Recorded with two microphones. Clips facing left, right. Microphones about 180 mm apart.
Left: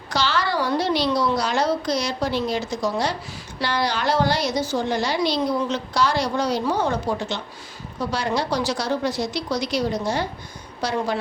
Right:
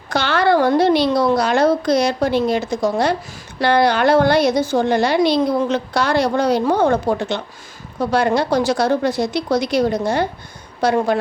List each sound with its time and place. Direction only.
0.1 s a woman's voice: 55° right (ahead or behind)